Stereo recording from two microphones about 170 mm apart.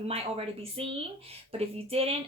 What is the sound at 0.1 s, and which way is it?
A woman's voice, 35° right (ahead or behind).